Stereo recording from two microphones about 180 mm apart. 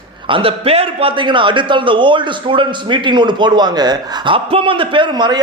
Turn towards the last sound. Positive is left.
turn(degrees=-25)  # may be behind; listen again after turning